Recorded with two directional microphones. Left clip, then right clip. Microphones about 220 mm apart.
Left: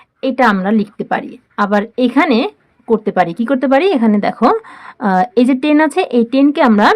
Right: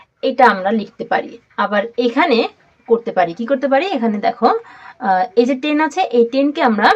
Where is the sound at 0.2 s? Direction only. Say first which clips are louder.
Right 1 dB; 40° left (ahead or behind).